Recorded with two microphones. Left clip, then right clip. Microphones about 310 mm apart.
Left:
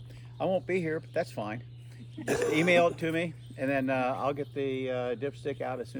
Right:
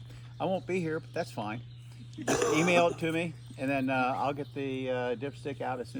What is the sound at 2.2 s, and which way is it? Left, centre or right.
Speech, right.